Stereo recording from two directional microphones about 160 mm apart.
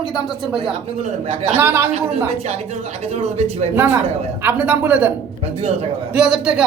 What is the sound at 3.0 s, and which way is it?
Speech, 40° right (ahead or behind).